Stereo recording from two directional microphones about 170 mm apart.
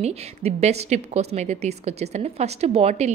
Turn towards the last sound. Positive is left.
turn(degrees=-40)  # may be behind; listen again after turning